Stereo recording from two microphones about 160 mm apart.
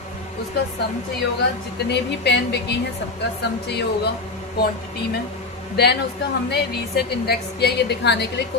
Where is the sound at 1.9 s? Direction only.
90° left.